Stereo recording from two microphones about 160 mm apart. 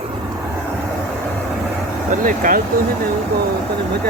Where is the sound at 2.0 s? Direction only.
55° right (ahead or behind).